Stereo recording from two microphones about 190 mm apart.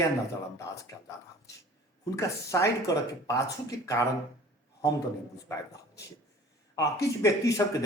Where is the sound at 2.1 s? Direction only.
15° left (ahead or behind).